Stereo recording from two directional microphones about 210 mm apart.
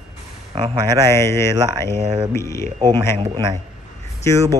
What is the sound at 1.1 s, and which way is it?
Speech, 15° left (ahead or behind).